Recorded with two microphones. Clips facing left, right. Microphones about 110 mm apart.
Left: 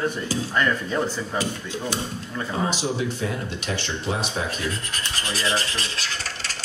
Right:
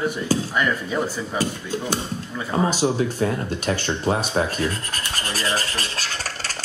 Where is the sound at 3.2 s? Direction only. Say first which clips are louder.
Right 5 dB; 45° right (ahead or behind).